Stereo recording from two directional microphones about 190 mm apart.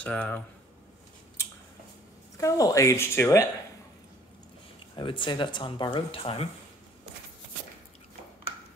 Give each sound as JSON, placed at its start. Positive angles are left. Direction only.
{"t": 0.0, "sound": "speech", "side_deg": 5}
{"t": 2.3, "sound": "speech", "side_deg": 15}
{"t": 4.9, "sound": "speech", "side_deg": 25}